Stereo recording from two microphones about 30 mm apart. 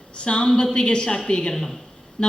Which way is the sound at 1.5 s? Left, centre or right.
Centre.